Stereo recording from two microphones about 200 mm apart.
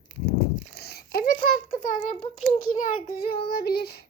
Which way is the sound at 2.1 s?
30° left (ahead or behind).